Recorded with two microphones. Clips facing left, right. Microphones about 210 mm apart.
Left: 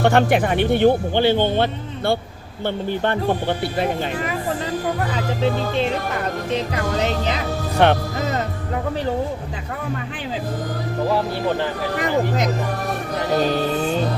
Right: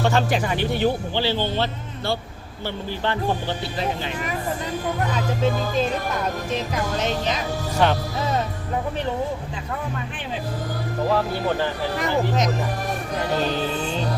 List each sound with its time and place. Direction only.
0.0 s speech: 60° left (ahead or behind)
5.5 s speech: 30° left (ahead or behind)
7.8 s speech: 60° left (ahead or behind)
13.5 s music: 50° left (ahead or behind)